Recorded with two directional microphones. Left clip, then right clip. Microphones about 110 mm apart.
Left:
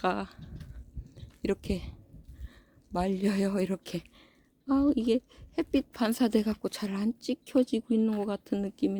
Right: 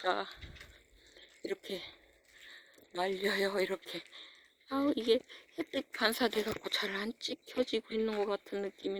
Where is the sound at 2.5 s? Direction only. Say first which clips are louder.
Left 11 dB; 40° left (ahead or behind).